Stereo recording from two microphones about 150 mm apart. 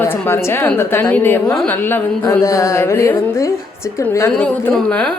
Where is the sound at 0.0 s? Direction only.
15° left (ahead or behind).